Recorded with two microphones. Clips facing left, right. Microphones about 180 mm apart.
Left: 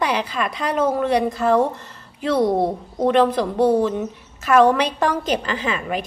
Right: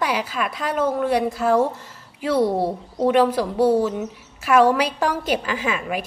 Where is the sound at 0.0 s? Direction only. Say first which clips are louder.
Left 2 dB; 5° right (ahead or behind).